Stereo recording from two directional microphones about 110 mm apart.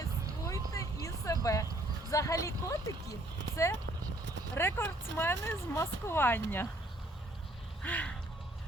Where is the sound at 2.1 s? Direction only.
30° left (ahead or behind).